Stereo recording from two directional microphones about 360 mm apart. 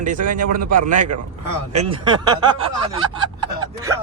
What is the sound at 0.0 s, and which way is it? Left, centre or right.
Speech, right.